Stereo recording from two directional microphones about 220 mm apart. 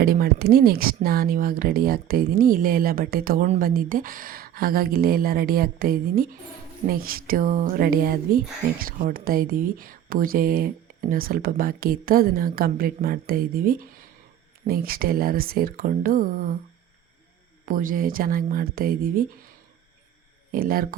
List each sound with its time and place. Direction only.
0.0 s speech: 40° right (ahead or behind)
17.7 s speech: 40° right (ahead or behind)
20.5 s speech: 40° right (ahead or behind)